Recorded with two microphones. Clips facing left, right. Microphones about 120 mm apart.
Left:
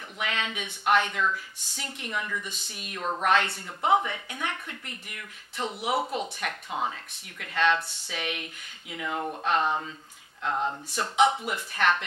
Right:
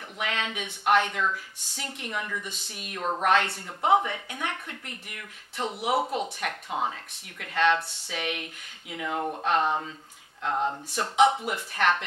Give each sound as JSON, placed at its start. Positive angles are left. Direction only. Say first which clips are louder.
{"t": 0.2, "sound": "speech", "louder": "right 1 dB", "side_deg": -50}
{"t": 2.5, "sound": "speech", "louder": "right 1 dB", "side_deg": -60}
{"t": 3.0, "sound": "speech", "louder": "right 1 dB", "side_deg": -35}
{"t": 3.3, "sound": "speech", "louder": "right 1 dB", "side_deg": -45}
{"t": 6.4, "sound": "speech", "louder": "right 1 dB", "side_deg": -40}
{"t": 9.2, "sound": "a sound", "louder": "right 2 dB", "side_deg": -25}
{"t": 9.5, "sound": "speech", "louder": "right 1 dB", "side_deg": -35}
{"t": 11.0, "sound": "speech", "louder": "right 2 dB", "side_deg": -50}